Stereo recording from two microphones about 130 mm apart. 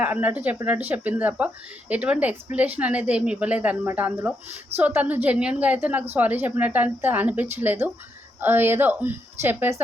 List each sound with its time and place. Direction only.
0.0 s a woman's voice: 10° right (ahead or behind)